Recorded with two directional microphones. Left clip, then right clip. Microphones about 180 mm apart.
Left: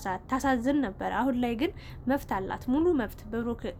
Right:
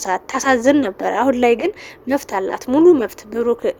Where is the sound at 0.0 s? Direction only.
40° right (ahead or behind).